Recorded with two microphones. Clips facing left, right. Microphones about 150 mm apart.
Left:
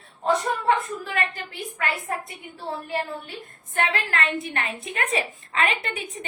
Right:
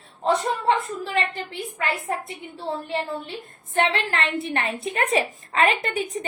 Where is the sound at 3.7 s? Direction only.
30° right (ahead or behind).